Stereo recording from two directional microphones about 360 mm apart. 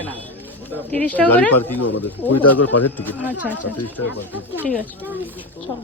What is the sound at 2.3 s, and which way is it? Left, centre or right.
Speech, left.